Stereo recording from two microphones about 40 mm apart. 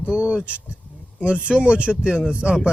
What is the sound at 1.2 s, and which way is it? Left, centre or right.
Speech, right.